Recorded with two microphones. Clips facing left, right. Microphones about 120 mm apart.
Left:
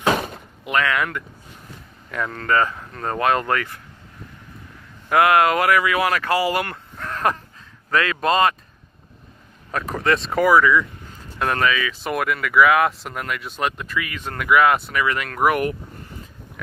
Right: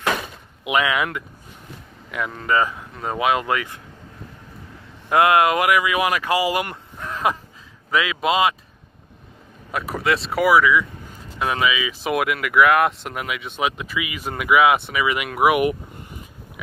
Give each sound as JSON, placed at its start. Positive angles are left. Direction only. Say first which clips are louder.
{"t": 0.1, "sound": "door", "louder": "left 5 dB", "side_deg": 45}
{"t": 0.7, "sound": "speech", "louder": "right 1 dB", "side_deg": -10}
{"t": 5.1, "sound": "speech", "louder": "even", "side_deg": -20}
{"t": 9.7, "sound": "speech", "louder": "left 1 dB", "side_deg": -10}